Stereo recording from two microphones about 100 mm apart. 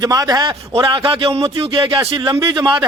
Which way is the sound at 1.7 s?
55° right (ahead or behind).